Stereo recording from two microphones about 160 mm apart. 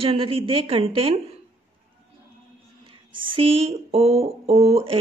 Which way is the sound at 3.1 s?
35° right (ahead or behind).